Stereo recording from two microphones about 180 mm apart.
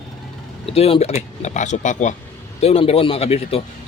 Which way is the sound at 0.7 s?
35° left (ahead or behind).